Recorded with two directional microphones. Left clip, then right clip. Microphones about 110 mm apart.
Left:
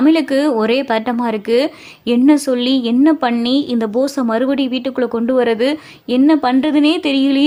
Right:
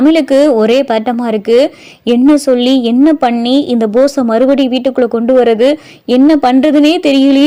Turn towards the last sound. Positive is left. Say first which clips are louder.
# right 6 dB
turn(degrees=-35)  # may be behind; listen again after turning